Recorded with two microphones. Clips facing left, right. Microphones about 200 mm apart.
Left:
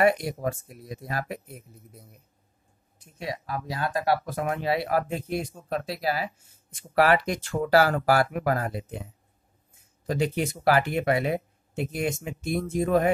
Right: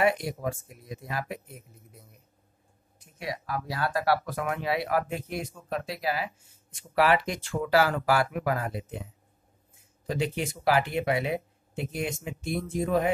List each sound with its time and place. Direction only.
0.0 s speech: 40° left (ahead or behind)
3.2 s speech: 25° left (ahead or behind)
7.6 s speech: 40° left (ahead or behind)
10.0 s speech: 45° left (ahead or behind)